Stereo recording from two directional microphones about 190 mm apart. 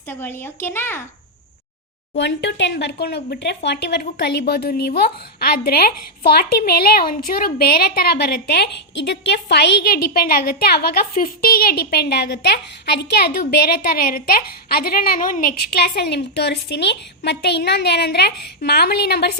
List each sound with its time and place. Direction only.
0.1 s speech: 10° left (ahead or behind)
2.1 s a woman's voice: 65° left (ahead or behind)